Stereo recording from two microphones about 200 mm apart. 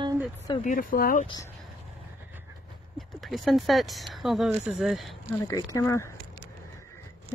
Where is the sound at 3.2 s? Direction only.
Centre (ahead or behind).